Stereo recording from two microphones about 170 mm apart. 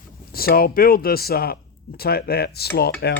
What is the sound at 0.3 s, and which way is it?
Speech, 60° left (ahead or behind).